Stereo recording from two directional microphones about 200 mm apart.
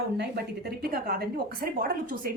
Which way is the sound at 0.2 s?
55° right (ahead or behind).